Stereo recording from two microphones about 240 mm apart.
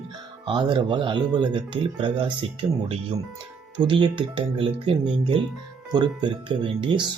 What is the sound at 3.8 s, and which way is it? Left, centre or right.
Speech, right.